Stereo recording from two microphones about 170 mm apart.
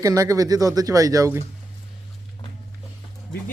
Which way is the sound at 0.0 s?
20° right (ahead or behind).